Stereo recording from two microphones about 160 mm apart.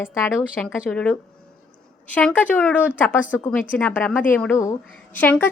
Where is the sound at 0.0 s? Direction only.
15° left (ahead or behind).